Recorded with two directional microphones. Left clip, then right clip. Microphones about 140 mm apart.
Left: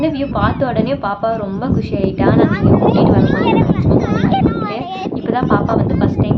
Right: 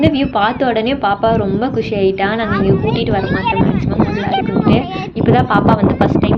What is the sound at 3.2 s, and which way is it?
Speech, 10° left (ahead or behind).